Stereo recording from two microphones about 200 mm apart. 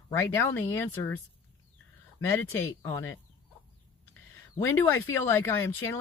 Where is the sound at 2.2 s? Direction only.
10° left (ahead or behind).